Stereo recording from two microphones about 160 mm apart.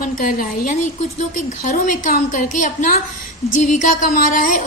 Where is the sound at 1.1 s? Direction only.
50° left (ahead or behind).